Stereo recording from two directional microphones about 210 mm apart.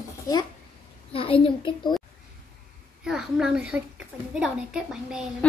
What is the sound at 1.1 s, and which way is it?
Speech, 25° left (ahead or behind).